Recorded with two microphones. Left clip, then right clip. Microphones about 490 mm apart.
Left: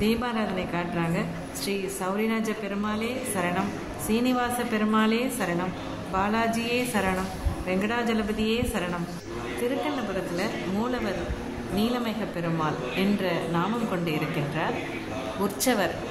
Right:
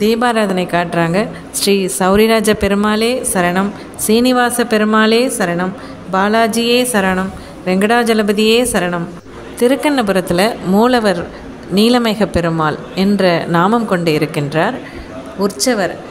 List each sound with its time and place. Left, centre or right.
0.0 s a woman's voice: left